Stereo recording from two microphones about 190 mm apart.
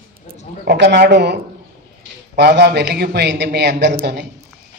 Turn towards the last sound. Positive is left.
turn(degrees=-60)  # may be behind; listen again after turning